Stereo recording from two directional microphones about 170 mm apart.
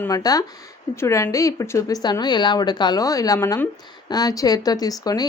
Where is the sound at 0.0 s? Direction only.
20° left (ahead or behind).